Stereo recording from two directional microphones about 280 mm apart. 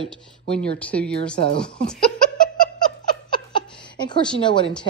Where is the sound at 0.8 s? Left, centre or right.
Centre.